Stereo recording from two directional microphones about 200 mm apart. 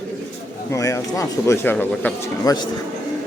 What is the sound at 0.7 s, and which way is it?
Speech, 15° left (ahead or behind).